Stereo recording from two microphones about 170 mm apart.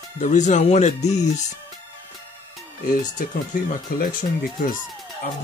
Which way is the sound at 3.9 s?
60° left (ahead or behind).